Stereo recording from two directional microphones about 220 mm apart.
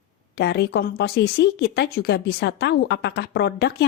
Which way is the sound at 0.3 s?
50° left (ahead or behind).